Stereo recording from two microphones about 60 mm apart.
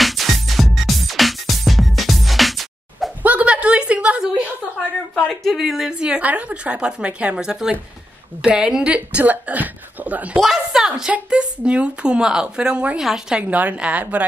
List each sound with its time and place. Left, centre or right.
0.0 s music: centre
3.2 s a sound: right
5.3 s a woman's voice: centre; by 10.4 s right
10.4 s a woman's voice: centre
13.0 s a woman's voice: centre
13.4 s speech: right